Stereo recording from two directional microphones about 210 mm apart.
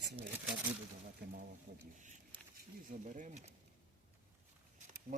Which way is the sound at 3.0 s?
35° right (ahead or behind).